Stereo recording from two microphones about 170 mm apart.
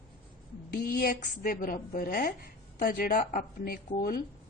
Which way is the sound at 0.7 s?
65° left (ahead or behind).